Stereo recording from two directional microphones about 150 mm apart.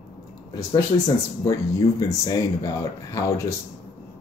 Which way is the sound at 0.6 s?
25° left (ahead or behind).